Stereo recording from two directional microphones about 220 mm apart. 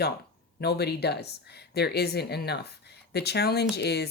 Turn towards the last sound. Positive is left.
turn(degrees=45)  # may be behind; listen again after turning